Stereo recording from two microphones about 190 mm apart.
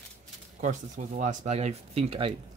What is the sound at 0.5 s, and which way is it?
Speech, 40° right (ahead or behind).